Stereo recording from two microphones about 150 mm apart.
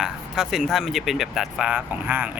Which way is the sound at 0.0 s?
5° right (ahead or behind).